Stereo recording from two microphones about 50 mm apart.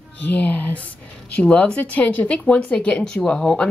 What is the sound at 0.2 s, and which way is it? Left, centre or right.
Speech, left.